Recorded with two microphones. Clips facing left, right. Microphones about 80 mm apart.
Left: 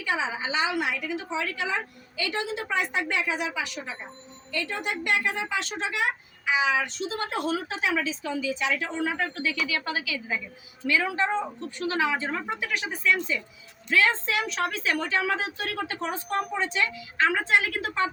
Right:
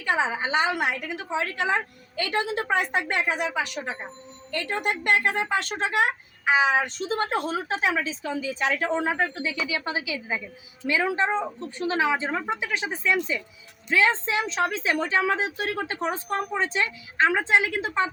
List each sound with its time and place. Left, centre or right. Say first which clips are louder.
0.0 s a woman's voice: right 4 dB; right
9.2 s a woman's voice: right 1 dB; right